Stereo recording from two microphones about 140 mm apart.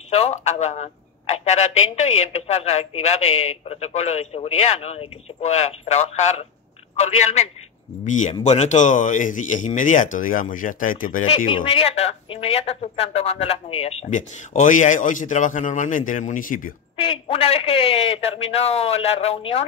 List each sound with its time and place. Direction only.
0.1 s a man's voice: 50° left (ahead or behind); by 11.2 s 75° left (ahead or behind)
11.2 s speech: 40° left (ahead or behind)
14.1 s a man's voice: 60° left (ahead or behind)
16.9 s speech: 45° left (ahead or behind)